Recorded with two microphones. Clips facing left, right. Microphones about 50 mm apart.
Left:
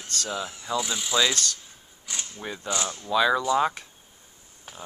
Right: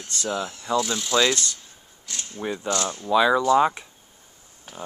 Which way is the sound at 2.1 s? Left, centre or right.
Centre.